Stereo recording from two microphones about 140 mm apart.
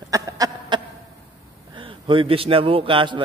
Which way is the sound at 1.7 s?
40° right (ahead or behind).